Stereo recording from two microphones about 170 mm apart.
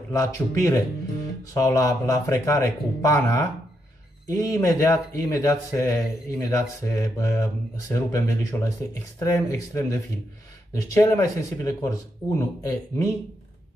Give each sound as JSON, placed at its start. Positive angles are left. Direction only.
{"t": 0.1, "sound": "speech", "side_deg": 20}
{"t": 11.0, "sound": "speech", "side_deg": 15}